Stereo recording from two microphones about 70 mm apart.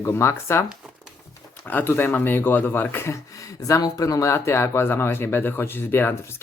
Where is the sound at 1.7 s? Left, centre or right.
Left.